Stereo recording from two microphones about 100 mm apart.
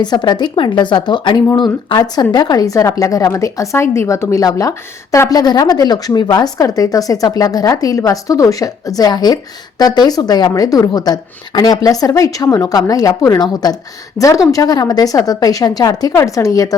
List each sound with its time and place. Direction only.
0.0 s a woman's voice: 45° left (ahead or behind)